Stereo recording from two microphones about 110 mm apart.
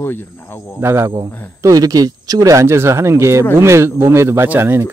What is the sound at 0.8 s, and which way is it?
Speech, 25° right (ahead or behind).